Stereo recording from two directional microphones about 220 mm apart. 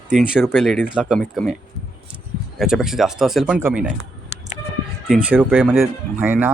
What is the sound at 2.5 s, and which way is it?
Speech, centre (ahead or behind).